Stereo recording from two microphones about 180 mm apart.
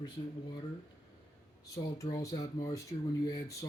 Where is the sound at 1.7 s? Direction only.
20° left (ahead or behind).